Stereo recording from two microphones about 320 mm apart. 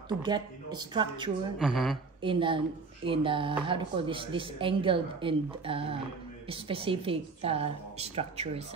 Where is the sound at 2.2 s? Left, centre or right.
Centre.